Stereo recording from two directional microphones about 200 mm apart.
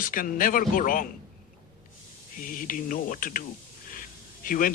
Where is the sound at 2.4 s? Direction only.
45° left (ahead or behind).